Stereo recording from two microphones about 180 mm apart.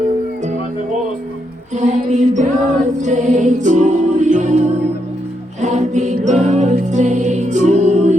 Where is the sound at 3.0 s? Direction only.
40° right (ahead or behind).